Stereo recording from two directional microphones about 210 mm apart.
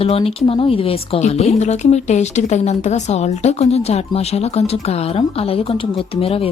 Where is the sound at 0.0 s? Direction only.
25° left (ahead or behind).